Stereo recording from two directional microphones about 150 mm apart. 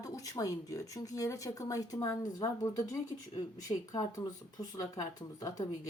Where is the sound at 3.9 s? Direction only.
25° left (ahead or behind).